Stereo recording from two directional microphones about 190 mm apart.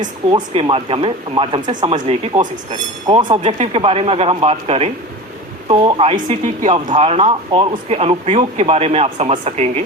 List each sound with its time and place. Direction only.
0.3 s speech: 30° right (ahead or behind)
3.4 s speech: 35° right (ahead or behind)